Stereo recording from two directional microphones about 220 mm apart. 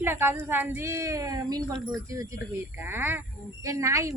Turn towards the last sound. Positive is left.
turn(degrees=-15)  # may be behind; listen again after turning